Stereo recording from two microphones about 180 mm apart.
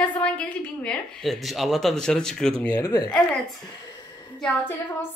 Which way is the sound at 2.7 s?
20° left (ahead or behind).